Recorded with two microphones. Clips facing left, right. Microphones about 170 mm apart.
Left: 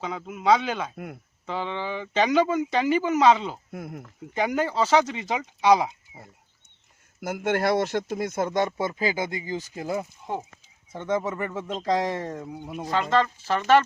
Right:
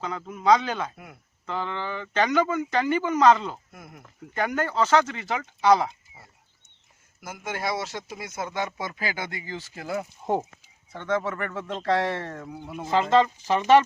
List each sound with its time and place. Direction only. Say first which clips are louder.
0.0 s speech: even; 10° left (ahead or behind)
3.7 s speech: left 10 dB; 55° left (ahead or behind)
4.4 s speech: left 1 dB; 10° left (ahead or behind)
7.2 s speech: left 8 dB; 70° left (ahead or behind); by 8.6 s 50° left (ahead or behind)
8.8 s speech: left 6 dB; 25° left (ahead or behind)
10.3 s speech: right 6 dB; 45° right (ahead or behind)
10.9 s speech: left 1 dB; 15° left (ahead or behind)
12.8 s speech: right 3 dB; 25° right (ahead or behind)